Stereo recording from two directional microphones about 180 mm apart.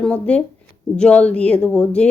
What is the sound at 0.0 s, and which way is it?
Speech, 5° left (ahead or behind).